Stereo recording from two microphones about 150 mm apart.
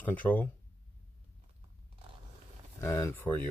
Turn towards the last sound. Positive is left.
turn(degrees=15)  # may be behind; listen again after turning